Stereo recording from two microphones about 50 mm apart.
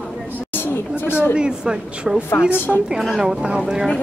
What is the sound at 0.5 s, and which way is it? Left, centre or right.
Chatter, left.